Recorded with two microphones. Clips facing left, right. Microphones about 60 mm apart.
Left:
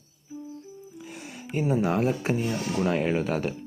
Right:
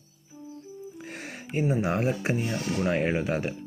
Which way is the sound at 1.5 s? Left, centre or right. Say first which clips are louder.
Left 2 dB; centre.